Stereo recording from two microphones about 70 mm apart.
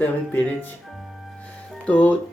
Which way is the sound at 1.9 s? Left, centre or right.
Left.